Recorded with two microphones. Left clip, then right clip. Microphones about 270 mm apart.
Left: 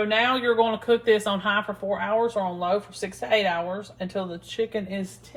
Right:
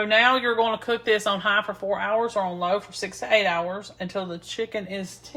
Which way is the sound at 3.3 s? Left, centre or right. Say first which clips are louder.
Right 2 dB; right.